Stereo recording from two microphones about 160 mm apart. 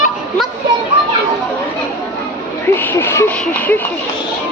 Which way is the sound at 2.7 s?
15° left (ahead or behind).